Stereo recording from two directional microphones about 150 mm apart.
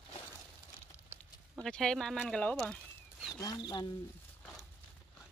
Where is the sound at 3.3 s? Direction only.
25° left (ahead or behind).